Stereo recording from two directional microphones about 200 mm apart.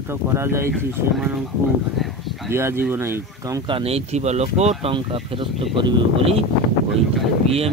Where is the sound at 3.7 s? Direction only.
30° right (ahead or behind).